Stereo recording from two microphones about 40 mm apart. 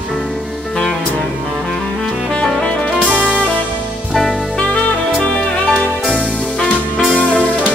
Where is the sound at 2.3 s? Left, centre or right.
Left.